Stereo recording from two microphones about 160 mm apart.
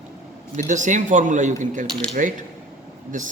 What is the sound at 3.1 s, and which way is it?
Speech, 55° right (ahead or behind).